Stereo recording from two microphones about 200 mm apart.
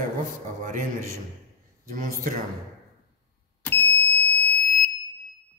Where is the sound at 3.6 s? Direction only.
10° left (ahead or behind).